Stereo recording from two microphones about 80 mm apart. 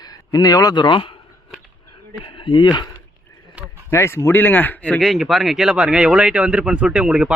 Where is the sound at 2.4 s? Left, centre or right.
Left.